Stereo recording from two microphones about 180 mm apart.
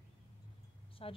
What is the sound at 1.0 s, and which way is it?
Speech, 30° left (ahead or behind).